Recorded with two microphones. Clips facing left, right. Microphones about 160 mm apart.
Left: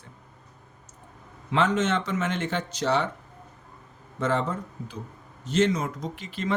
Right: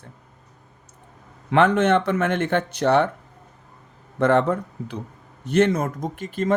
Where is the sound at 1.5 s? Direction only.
60° right (ahead or behind).